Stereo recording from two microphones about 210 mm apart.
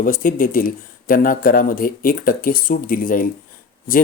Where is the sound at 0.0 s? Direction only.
40° left (ahead or behind).